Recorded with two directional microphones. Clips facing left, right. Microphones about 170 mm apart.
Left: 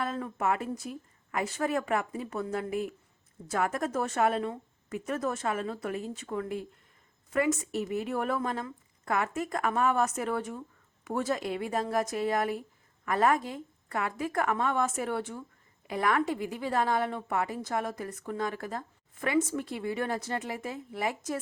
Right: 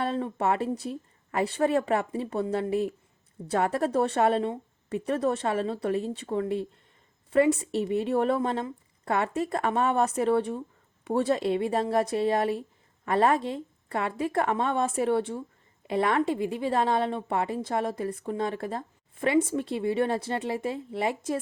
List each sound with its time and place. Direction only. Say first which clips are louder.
0.0 s a woman's voice: right 4 dB; 30° right (ahead or behind)